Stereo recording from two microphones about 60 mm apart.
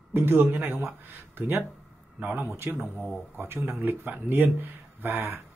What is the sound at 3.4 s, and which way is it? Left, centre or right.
Speech, right.